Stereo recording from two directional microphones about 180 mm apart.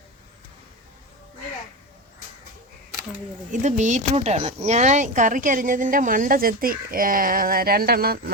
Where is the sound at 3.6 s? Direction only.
40° right (ahead or behind); by 8.3 s 60° right (ahead or behind).